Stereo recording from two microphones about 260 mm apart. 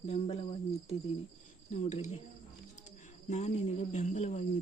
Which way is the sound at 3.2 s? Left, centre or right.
Left.